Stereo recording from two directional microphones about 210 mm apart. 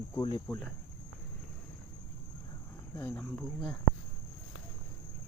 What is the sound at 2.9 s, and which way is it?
Speech, 10° left (ahead or behind).